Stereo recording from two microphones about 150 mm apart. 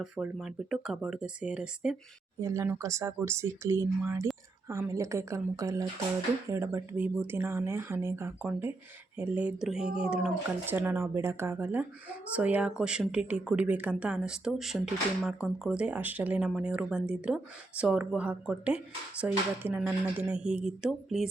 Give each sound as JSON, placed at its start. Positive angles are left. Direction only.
{"t": 0.0, "sound": "speech", "side_deg": 0}
{"t": 2.4, "sound": "speech", "side_deg": -20}